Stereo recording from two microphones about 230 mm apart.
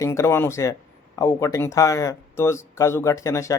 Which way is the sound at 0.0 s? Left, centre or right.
Centre.